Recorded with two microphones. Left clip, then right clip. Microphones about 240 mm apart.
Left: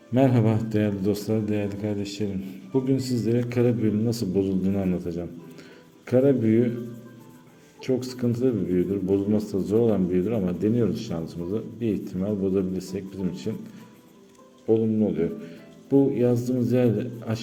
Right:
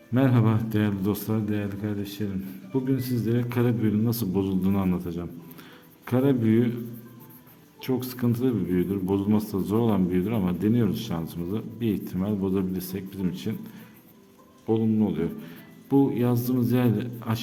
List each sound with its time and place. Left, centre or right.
0.1 s a man's voice: centre
7.8 s a man's voice: centre
14.7 s a man's voice: centre